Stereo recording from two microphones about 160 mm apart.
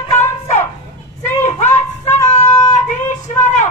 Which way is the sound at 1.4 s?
45° left (ahead or behind).